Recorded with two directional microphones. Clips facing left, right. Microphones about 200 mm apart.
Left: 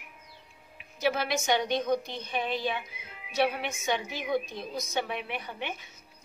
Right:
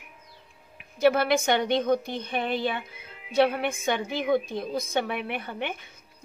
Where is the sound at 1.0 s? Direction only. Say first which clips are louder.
Right 7 dB; 55° right (ahead or behind).